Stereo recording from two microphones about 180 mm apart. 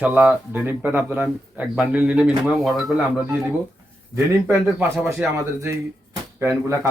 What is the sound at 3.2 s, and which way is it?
Speech, 15° right (ahead or behind).